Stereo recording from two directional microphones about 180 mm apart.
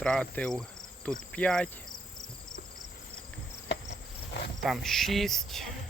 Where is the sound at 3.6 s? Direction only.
70° left (ahead or behind).